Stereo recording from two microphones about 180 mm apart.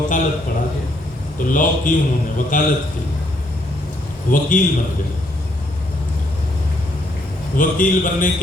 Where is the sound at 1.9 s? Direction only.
45° left (ahead or behind).